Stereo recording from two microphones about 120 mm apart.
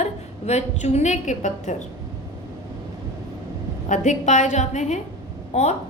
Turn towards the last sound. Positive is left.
turn(degrees=70)  # may be behind; listen again after turning